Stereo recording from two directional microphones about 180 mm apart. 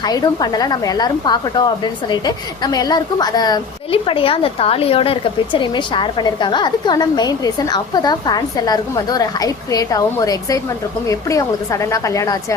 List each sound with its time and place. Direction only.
0.0 s a woman's voice: 20° left (ahead or behind)